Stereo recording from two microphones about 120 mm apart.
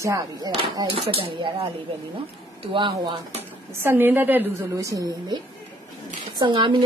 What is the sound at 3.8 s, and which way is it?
Speech, 15° right (ahead or behind).